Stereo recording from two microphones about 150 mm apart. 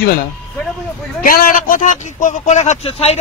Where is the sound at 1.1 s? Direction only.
70° left (ahead or behind).